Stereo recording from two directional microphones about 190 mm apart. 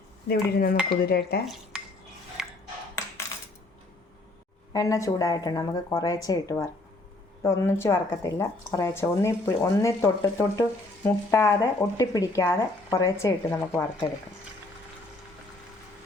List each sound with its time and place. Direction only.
0.3 s dishes: 55° left (ahead or behind)
1.0 s speech: 55° left (ahead or behind)
2.4 s a sound: 5° right (ahead or behind)
4.7 s speech: 15° left (ahead or behind)
7.4 s speech: 15° left (ahead or behind)